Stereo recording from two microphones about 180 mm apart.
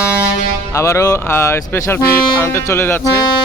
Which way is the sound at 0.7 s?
15° left (ahead or behind).